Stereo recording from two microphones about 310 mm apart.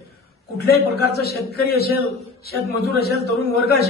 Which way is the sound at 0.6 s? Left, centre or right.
Left.